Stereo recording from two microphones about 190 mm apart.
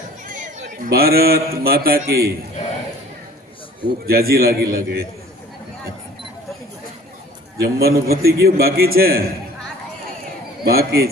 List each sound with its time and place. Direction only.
0.3 s a man's voice: 45° right (ahead or behind)
4.0 s a man's voice: 55° right (ahead or behind)
7.6 s a man's voice: 55° right (ahead or behind)
10.6 s a man's voice: 55° right (ahead or behind)